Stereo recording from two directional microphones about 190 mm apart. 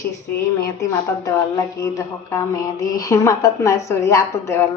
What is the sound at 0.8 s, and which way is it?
A woman's voice, 20° left (ahead or behind).